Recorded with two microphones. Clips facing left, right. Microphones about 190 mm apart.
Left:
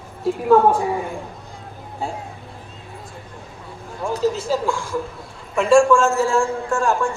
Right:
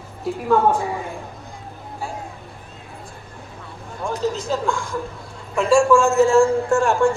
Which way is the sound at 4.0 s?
5° left (ahead or behind).